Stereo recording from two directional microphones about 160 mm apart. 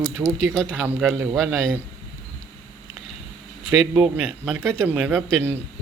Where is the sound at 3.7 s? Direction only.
Centre (ahead or behind).